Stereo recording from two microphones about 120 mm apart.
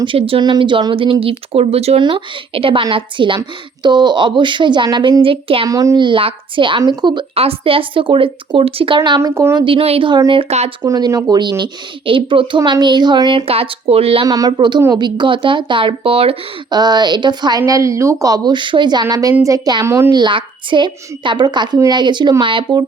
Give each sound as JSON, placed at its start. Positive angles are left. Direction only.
{"t": 0.0, "sound": "speech", "side_deg": -50}
{"t": 2.0, "sound": "a woman's voice", "side_deg": -45}
{"t": 5.6, "sound": "a woman's voice", "side_deg": -30}
{"t": 6.0, "sound": "a woman's voice", "side_deg": -45}
{"t": 7.3, "sound": "speech", "side_deg": -50}
{"t": 9.0, "sound": "a woman's voice", "side_deg": -35}
{"t": 9.3, "sound": "a woman's voice", "side_deg": -25}
{"t": 9.6, "sound": "speech", "side_deg": -45}
{"t": 10.1, "sound": "a woman's voice", "side_deg": -40}
{"t": 10.8, "sound": "a woman's voice", "side_deg": -30}
{"t": 13.4, "sound": "speech", "side_deg": -50}
{"t": 14.3, "sound": "a woman's voice", "side_deg": -30}
{"t": 16.6, "sound": "a woman's voice", "side_deg": -35}
{"t": 17.7, "sound": "a woman's voice", "side_deg": -25}